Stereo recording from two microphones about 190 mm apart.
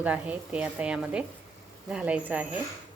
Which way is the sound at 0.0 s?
5° right (ahead or behind).